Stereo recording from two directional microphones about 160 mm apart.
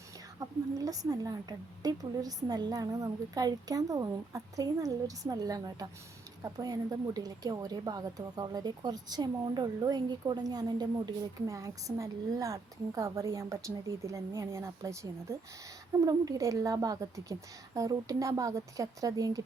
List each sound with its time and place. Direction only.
0.3 s a woman's voice: 20° right (ahead or behind)